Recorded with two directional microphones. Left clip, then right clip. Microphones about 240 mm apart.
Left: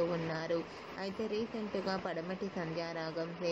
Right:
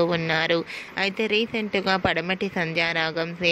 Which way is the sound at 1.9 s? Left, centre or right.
Right.